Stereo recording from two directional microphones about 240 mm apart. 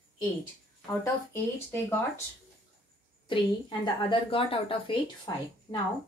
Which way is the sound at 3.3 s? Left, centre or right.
Centre.